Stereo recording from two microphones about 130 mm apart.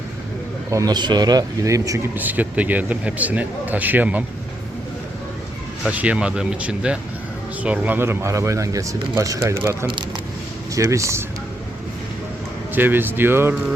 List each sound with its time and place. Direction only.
0.7 s a man's voice: 30° right (ahead or behind)
2.1 s a man's voice: 15° right (ahead or behind)
5.8 s a man's voice: 10° right (ahead or behind)
10.8 s speech: 25° right (ahead or behind)
12.7 s a man's voice: 15° right (ahead or behind)